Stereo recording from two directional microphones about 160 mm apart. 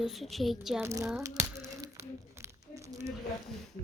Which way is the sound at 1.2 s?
20° right (ahead or behind).